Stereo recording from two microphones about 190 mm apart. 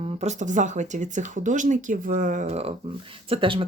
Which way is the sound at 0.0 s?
35° right (ahead or behind).